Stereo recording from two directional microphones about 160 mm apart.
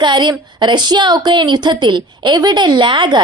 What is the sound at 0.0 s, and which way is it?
A woman's voice, 30° right (ahead or behind).